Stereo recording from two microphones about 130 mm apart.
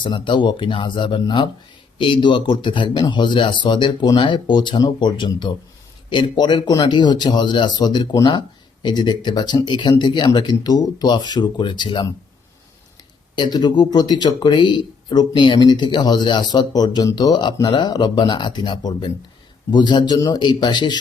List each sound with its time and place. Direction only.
0.0 s speech: 40° left (ahead or behind)
13.3 s speech: 35° left (ahead or behind)